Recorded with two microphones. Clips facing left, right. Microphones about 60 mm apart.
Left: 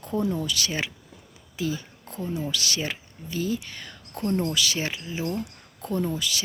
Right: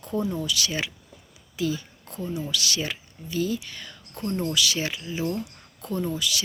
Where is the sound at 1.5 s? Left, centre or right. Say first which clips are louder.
Right 2 dB; left.